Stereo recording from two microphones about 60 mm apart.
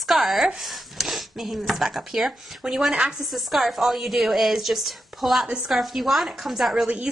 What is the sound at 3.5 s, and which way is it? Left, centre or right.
A woman's voice, centre.